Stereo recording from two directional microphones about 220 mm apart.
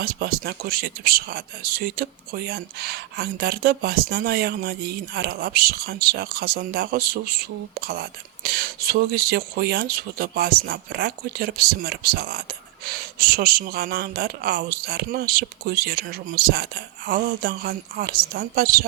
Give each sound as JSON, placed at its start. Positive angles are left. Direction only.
{"t": 0.0, "sound": "speech", "side_deg": -45}